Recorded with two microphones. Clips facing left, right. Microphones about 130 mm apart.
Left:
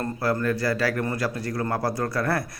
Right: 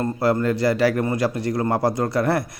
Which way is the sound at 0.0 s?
25° right (ahead or behind).